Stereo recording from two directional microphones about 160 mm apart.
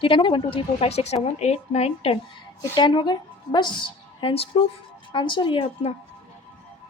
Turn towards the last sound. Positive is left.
turn(degrees=35)  # may be behind; listen again after turning